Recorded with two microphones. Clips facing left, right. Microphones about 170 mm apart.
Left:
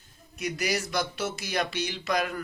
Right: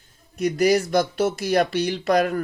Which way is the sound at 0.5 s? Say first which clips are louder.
Right 11 dB; 55° right (ahead or behind).